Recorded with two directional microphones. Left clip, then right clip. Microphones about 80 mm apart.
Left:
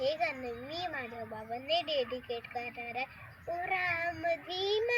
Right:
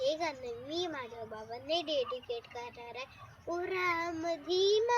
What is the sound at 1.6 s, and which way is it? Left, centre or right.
A child's voice, right.